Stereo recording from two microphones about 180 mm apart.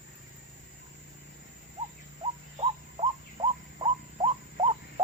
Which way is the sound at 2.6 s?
30° right (ahead or behind).